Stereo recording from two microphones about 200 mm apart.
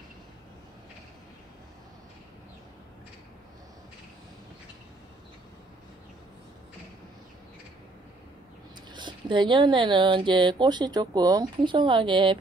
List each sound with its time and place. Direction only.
8.9 s speech: 25° right (ahead or behind)